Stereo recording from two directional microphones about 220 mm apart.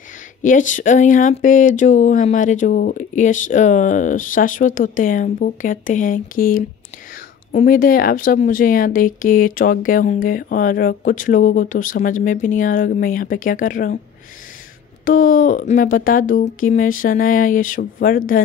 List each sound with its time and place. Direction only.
0.4 s speech: 35° left (ahead or behind)
15.0 s speech: 40° left (ahead or behind)